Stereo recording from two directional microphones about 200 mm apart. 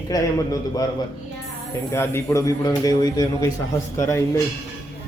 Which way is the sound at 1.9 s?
15° left (ahead or behind).